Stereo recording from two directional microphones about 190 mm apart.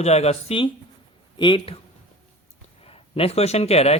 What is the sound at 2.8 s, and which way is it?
Speech, 30° left (ahead or behind).